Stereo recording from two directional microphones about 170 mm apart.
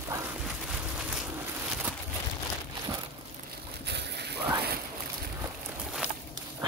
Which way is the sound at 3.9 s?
80° right.